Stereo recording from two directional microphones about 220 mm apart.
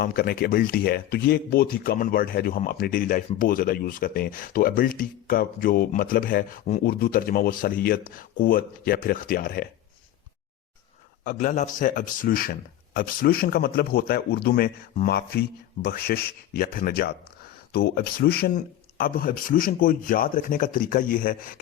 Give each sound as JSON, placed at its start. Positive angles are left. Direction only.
{"t": 0.0, "sound": "speech", "side_deg": 40}
{"t": 11.2, "sound": "speech", "side_deg": 35}